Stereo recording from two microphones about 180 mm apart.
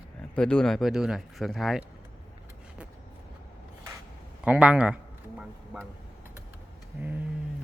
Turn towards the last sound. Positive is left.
turn(degrees=-10)  # may be behind; listen again after turning